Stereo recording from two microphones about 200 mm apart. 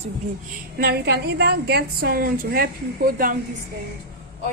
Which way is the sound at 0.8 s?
55° right (ahead or behind).